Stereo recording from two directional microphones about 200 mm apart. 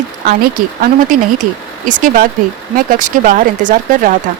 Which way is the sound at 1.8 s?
45° right (ahead or behind).